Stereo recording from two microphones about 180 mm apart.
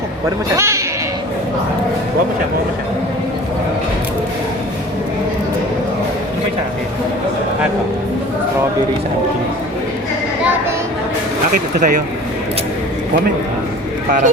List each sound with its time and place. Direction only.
0.5 s speech: 15° right (ahead or behind)
11.5 s speech: 45° right (ahead or behind)